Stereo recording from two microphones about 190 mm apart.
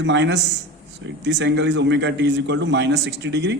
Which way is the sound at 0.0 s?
65° right (ahead or behind).